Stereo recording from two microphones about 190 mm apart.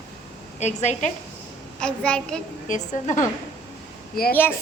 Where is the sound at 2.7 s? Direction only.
40° left (ahead or behind).